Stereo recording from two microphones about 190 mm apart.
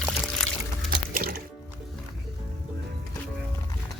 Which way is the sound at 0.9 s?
50° right (ahead or behind).